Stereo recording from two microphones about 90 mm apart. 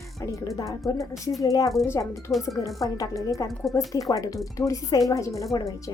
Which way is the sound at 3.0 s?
40° left (ahead or behind).